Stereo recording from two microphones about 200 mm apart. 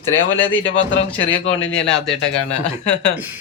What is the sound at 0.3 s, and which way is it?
Speech, 10° left (ahead or behind).